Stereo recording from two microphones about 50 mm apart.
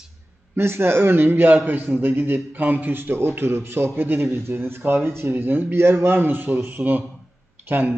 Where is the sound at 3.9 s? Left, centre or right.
Right.